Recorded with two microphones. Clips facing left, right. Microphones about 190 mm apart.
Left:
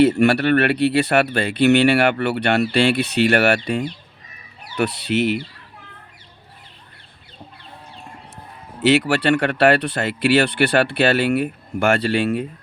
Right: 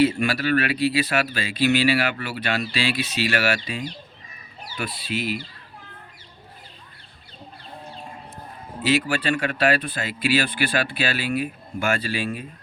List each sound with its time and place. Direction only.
0.2 s speech: 70° left (ahead or behind)
8.8 s speech: 70° left (ahead or behind)